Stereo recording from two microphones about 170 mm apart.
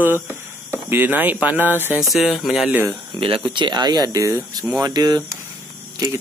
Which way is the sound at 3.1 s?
30° right (ahead or behind).